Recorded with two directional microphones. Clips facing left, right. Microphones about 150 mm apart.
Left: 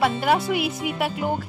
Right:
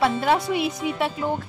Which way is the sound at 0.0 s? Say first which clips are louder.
Even; 5° left (ahead or behind).